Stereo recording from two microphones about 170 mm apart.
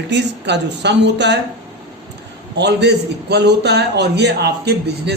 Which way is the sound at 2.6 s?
80° right.